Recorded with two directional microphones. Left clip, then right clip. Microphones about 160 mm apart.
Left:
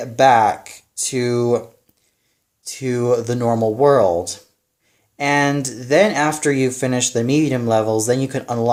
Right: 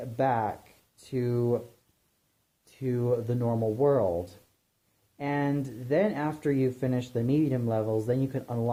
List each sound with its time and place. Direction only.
0.2 s speech: 15° left (ahead or behind)
2.6 s speech: 15° left (ahead or behind)
5.1 s speech: 15° left (ahead or behind)